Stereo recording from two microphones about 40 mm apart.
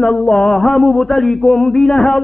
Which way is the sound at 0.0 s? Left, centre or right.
Centre.